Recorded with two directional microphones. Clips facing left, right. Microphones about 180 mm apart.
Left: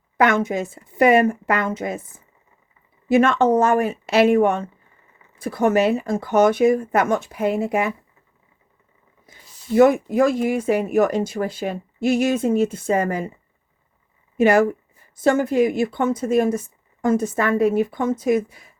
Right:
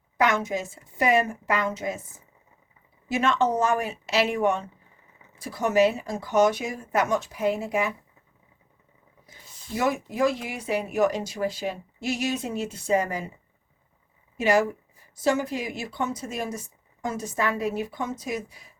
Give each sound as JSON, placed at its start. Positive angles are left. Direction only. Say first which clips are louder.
{"t": 0.2, "sound": "speech", "louder": "left 6 dB", "side_deg": 55}
{"t": 3.1, "sound": "speech", "louder": "left 8 dB", "side_deg": 55}
{"t": 9.7, "sound": "speech", "louder": "left 11 dB", "side_deg": 55}
{"t": 14.3, "sound": "speech", "louder": "left 6 dB", "side_deg": 55}